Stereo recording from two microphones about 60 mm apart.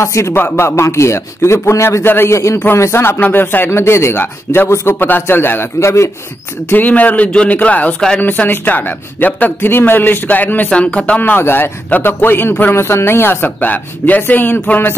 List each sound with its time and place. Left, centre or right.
0.0 s a man's voice: left
2.0 s a man's voice: left
2.3 s a man's voice: left
3.7 s a man's voice: left
5.2 s a man's voice: left
5.8 s a man's voice: left
6.7 s a man's voice: left
10.7 s speech: centre
11.1 s a man's voice: left